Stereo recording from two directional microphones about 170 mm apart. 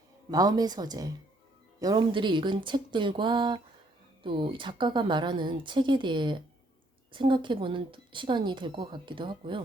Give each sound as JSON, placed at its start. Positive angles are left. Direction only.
{"t": 0.3, "sound": "speech", "side_deg": -25}